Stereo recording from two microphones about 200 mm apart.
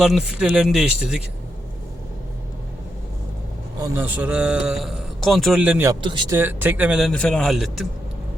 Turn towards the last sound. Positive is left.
turn(degrees=0)  # may be behind; listen again after turning